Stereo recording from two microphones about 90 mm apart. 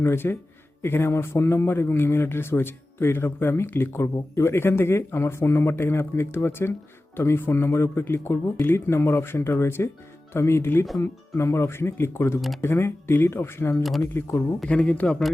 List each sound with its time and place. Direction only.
0.0 s a man's voice: 25° left (ahead or behind)
13.8 s speech: centre (ahead or behind)
14.1 s a man's voice: 30° left (ahead or behind)
14.7 s speech: 15° left (ahead or behind)